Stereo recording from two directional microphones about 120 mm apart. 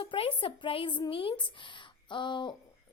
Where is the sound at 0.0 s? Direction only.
45° left (ahead or behind).